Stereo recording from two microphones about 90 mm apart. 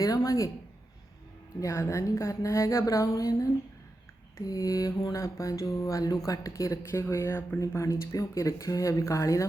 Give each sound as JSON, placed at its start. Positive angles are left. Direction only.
{"t": 0.0, "sound": "mantra", "side_deg": 40}
{"t": 1.6, "sound": "mantra", "side_deg": 30}